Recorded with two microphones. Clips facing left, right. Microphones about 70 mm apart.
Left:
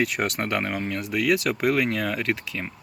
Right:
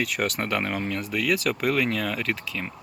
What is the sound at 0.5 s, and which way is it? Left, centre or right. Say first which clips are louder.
Speech: even; centre.